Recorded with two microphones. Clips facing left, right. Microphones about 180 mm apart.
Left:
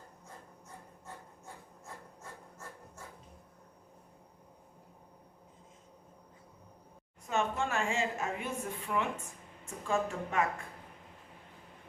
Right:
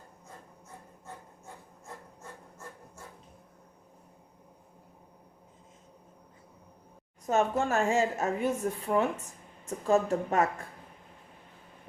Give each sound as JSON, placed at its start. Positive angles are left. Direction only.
{"t": 7.3, "sound": "a woman's voice", "side_deg": -40}